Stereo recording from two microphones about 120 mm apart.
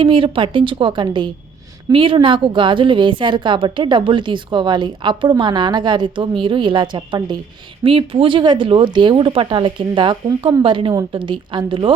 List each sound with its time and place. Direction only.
0.0 s a woman's voice: 45° right (ahead or behind)